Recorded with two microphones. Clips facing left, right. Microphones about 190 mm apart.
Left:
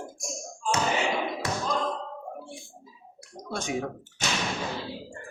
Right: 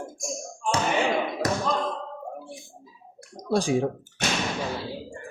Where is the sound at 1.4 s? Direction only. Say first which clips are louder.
Right 5 dB; 40° right (ahead or behind).